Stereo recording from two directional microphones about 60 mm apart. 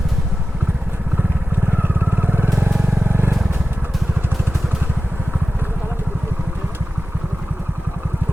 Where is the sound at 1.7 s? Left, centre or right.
Right.